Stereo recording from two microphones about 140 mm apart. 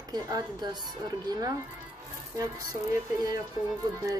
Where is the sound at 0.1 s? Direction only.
30° right (ahead or behind).